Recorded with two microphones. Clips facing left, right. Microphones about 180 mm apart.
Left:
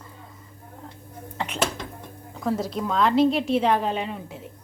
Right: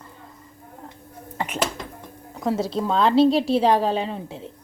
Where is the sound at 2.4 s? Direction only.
25° right (ahead or behind).